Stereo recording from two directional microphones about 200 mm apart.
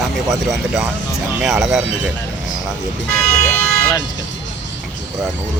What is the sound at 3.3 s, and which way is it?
Vehicle, 15° left (ahead or behind).